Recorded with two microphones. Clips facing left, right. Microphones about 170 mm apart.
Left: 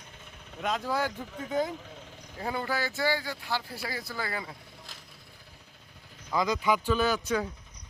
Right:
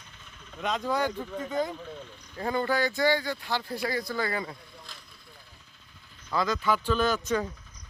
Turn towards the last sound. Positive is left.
turn(degrees=10)  # may be behind; listen again after turning